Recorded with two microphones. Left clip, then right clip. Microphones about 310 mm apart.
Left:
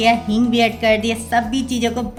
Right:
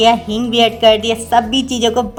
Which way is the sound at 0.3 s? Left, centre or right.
Centre.